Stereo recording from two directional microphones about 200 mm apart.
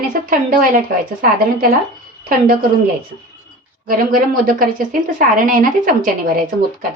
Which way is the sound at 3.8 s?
45° right (ahead or behind).